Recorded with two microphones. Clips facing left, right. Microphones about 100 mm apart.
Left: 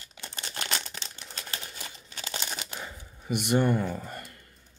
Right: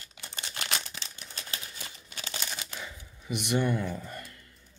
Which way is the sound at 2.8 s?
45° left (ahead or behind).